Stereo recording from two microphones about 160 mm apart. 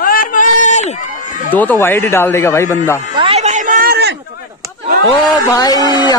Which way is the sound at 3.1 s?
35° right (ahead or behind).